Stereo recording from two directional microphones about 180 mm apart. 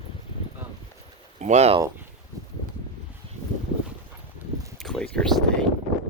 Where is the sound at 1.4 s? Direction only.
40° right (ahead or behind).